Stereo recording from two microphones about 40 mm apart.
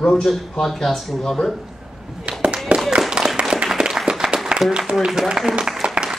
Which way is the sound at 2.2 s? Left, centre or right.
Right.